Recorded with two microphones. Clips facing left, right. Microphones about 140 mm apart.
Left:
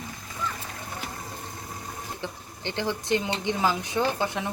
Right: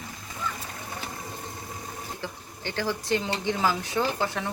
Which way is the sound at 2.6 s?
20° left (ahead or behind).